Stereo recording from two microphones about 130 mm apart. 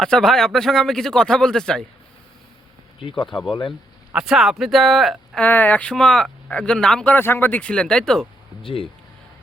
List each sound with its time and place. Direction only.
0.0 s speech: 5° left (ahead or behind)
3.0 s speech: 40° left (ahead or behind)
3.2 s speech: centre (ahead or behind)
3.5 s speech: 40° left (ahead or behind)
4.1 s speech: 5° right (ahead or behind)
5.4 s speech: 15° left (ahead or behind)
8.6 s speech: 45° left (ahead or behind)